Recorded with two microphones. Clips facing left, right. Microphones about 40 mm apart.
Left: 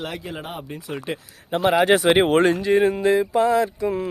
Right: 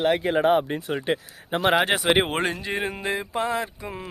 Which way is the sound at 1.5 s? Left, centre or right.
Right.